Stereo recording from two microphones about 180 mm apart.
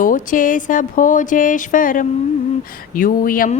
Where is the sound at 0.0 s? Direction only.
50° left (ahead or behind).